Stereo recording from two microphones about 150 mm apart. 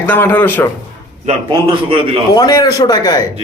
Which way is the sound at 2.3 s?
25° left (ahead or behind).